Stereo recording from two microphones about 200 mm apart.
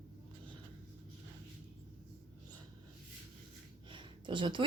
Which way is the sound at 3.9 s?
25° right (ahead or behind).